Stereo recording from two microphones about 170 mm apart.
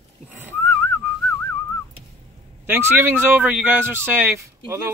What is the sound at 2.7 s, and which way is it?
Speech, 15° right (ahead or behind).